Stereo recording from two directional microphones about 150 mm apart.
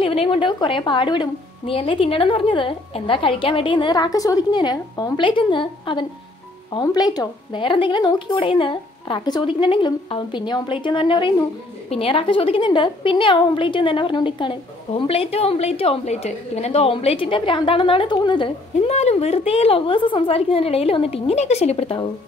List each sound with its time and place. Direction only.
0.0 s a woman's voice: 40° left (ahead or behind)
18.9 s a woman's voice: 45° left (ahead or behind)